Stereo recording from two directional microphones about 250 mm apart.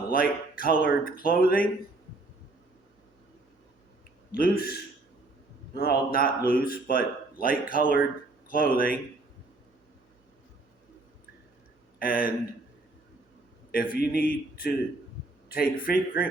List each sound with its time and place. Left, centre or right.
0.1 s speech: left
4.4 s speech: left
11.9 s speech: left
13.7 s a man's voice: left